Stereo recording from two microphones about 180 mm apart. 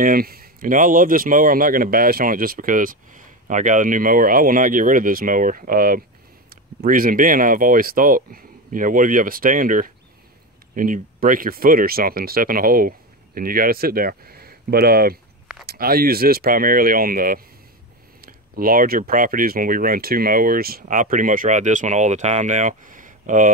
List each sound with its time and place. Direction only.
0.0 s speech: 55° right (ahead or behind)